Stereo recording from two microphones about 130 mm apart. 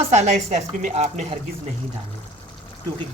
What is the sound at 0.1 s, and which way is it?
A woman's voice, 65° right (ahead or behind).